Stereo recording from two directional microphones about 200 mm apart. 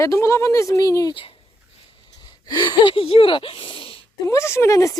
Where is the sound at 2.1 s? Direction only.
20° left (ahead or behind).